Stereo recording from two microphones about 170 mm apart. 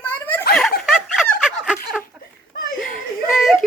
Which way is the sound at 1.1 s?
Centre (ahead or behind).